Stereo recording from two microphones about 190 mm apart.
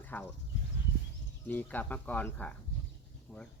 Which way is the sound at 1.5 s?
10° left (ahead or behind).